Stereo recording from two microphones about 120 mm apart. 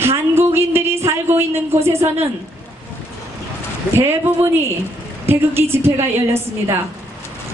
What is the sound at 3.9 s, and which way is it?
A woman's voice, 20° right (ahead or behind).